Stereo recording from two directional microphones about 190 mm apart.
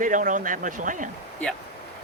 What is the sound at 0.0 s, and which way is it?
Speech, 45° right (ahead or behind).